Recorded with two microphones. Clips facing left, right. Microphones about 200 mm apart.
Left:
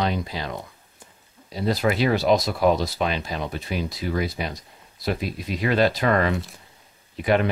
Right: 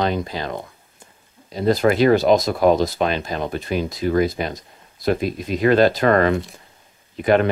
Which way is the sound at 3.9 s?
50° right (ahead or behind).